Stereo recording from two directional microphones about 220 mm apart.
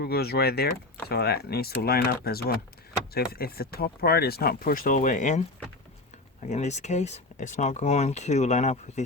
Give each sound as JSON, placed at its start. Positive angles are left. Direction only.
{"t": 0.0, "sound": "speech", "side_deg": 45}
{"t": 6.5, "sound": "speech", "side_deg": 30}